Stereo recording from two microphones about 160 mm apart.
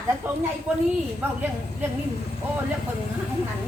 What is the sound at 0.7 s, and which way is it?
Speech, 10° right (ahead or behind).